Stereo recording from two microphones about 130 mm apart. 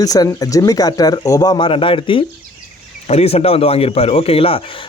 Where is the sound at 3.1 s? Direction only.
55° left (ahead or behind).